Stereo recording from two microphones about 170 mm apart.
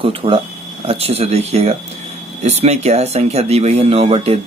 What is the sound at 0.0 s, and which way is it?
Speech, 35° right (ahead or behind).